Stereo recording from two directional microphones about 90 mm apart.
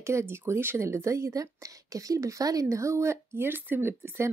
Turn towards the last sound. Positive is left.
turn(degrees=-25)  # may be behind; listen again after turning